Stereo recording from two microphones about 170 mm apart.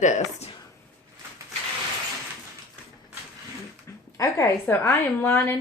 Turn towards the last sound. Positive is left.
turn(degrees=15)  # may be behind; listen again after turning